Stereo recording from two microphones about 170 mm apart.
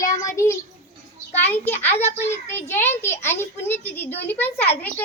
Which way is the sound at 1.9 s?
40° left (ahead or behind).